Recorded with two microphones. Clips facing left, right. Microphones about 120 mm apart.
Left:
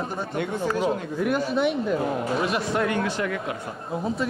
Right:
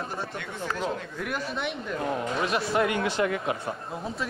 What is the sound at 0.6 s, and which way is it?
A man's voice, 10° left (ahead or behind).